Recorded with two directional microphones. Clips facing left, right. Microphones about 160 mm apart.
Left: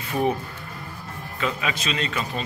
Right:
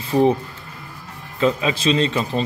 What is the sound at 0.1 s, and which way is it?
Speech, 30° right (ahead or behind).